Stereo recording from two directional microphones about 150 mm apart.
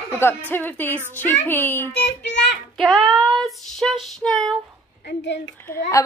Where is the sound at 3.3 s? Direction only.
Centre (ahead or behind).